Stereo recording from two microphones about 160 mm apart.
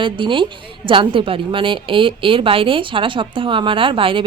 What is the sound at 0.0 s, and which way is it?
A woman's voice, 30° right (ahead or behind).